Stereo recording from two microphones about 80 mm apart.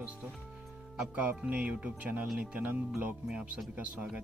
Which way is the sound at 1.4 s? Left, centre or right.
Centre.